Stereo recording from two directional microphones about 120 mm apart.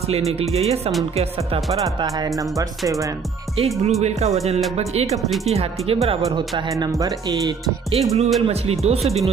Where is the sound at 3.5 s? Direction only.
60° right (ahead or behind).